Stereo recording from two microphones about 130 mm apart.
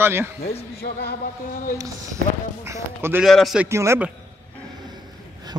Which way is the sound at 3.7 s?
20° right (ahead or behind).